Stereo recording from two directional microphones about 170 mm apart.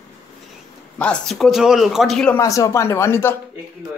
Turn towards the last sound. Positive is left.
turn(degrees=15)  # may be behind; listen again after turning